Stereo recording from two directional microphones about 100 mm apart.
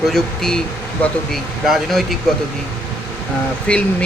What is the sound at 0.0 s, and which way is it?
Speech, 5° left (ahead or behind).